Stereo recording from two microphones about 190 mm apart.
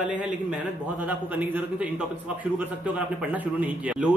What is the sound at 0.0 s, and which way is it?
A man's voice, 5° right (ahead or behind).